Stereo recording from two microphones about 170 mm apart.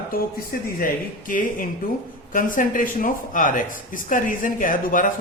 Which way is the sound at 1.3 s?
50° left (ahead or behind).